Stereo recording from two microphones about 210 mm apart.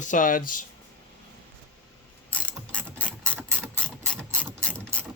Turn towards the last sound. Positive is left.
turn(degrees=5)  # may be behind; listen again after turning